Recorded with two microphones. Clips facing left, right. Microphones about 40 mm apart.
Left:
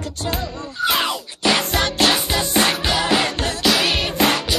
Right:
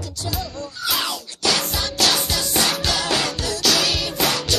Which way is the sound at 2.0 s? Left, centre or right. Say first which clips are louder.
Left 3 dB; left.